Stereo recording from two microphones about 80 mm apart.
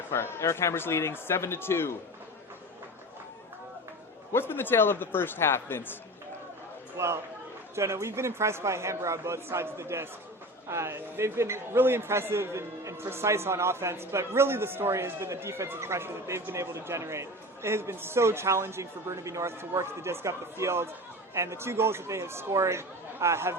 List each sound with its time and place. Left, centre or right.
0.1 s speech: left
4.3 s speech: left
6.9 s a man's voice: right